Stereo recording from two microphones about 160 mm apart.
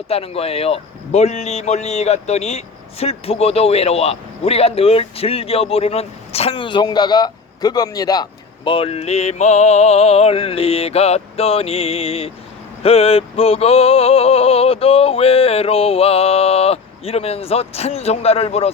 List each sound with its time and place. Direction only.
0.1 s a man's voice: 40° left (ahead or behind)